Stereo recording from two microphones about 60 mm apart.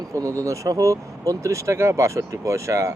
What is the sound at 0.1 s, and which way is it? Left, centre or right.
Speech, right.